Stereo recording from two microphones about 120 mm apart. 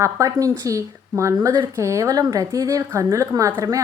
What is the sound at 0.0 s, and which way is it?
Speech, 25° right (ahead or behind).